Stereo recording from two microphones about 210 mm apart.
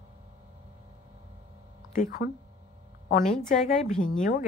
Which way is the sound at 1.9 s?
40° left (ahead or behind).